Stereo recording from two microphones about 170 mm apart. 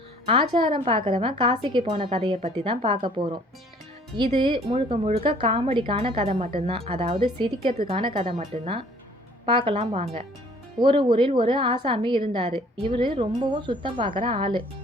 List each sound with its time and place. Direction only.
0.3 s a woman's voice: 30° right (ahead or behind)